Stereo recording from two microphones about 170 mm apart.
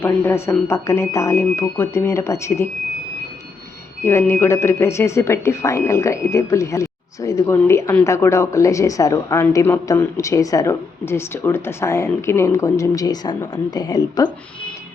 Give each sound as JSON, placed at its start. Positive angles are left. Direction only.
{"t": 0.0, "sound": "speech", "side_deg": 15}
{"t": 4.0, "sound": "speech", "side_deg": 15}